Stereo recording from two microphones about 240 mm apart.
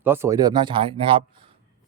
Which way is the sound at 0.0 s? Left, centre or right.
Centre.